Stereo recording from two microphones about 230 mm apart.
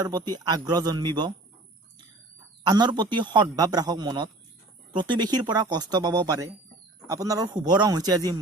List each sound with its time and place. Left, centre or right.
0.0 s speech: centre
2.6 s a man's voice: centre